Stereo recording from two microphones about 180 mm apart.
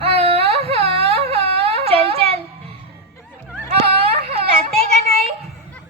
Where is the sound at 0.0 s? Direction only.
35° right (ahead or behind).